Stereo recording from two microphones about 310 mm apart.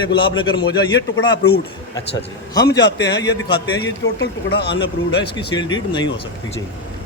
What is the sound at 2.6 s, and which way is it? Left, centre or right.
Speech, left.